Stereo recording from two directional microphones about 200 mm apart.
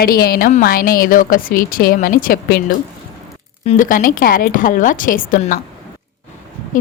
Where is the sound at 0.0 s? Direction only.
50° left (ahead or behind).